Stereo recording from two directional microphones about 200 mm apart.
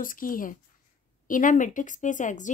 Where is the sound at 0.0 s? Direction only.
45° left (ahead or behind).